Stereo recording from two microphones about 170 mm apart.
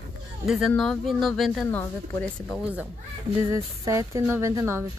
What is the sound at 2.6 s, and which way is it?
Speech, 10° right (ahead or behind).